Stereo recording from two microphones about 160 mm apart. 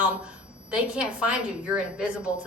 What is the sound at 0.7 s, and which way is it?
A woman's voice, 5° right (ahead or behind).